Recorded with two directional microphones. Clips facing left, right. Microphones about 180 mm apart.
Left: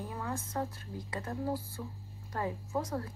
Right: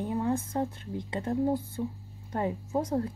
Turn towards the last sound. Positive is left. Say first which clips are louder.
# right 6 dB
turn(degrees=-25)  # may be behind; listen again after turning